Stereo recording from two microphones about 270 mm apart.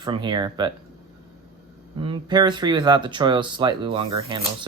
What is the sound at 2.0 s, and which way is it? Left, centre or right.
Speech, centre.